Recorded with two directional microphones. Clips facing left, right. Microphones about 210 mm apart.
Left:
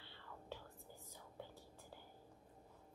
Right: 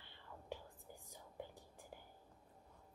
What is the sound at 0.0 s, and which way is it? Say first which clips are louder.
Whispering: left 1 dB; 15° right (ahead or behind).